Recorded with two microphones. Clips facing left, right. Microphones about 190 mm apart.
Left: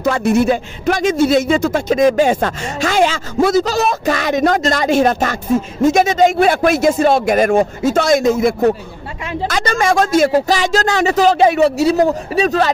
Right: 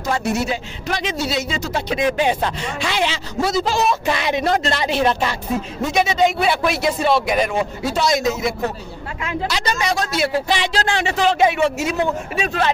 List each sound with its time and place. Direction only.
0.0 s a man's voice: 55° left (ahead or behind); by 12.7 s 40° left (ahead or behind)